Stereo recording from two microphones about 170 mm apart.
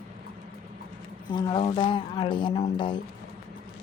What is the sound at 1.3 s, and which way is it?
A woman's voice, 25° left (ahead or behind).